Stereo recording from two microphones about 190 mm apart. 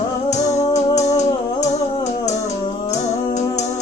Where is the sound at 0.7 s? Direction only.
35° left (ahead or behind).